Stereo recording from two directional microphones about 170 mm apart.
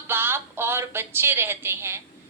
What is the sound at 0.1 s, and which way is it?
A woman's voice, 15° right (ahead or behind).